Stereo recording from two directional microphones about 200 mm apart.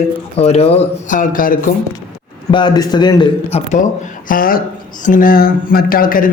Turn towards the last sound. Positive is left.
turn(degrees=45)  # may be behind; listen again after turning